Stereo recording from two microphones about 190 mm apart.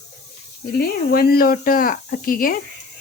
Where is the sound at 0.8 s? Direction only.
55° left (ahead or behind).